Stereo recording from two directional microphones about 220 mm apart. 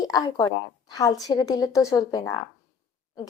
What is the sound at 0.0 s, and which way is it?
A woman's voice, 15° left (ahead or behind).